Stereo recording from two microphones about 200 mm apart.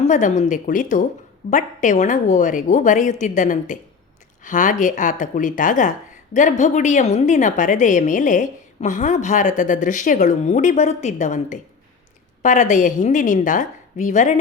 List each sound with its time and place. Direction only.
0.0 s a woman's voice: 40° left (ahead or behind)